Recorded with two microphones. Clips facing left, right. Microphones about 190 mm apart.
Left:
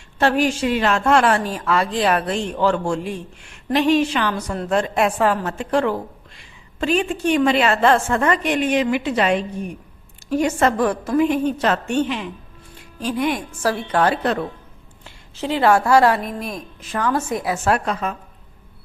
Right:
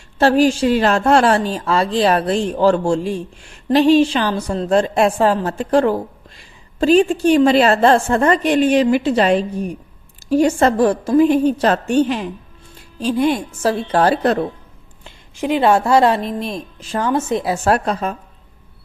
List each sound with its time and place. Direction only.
0.2 s a woman's voice: 35° right (ahead or behind)
15.0 s a woman's voice: 15° right (ahead or behind); by 18.2 s 35° right (ahead or behind)